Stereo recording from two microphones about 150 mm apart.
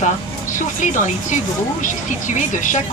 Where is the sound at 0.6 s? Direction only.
60° left (ahead or behind).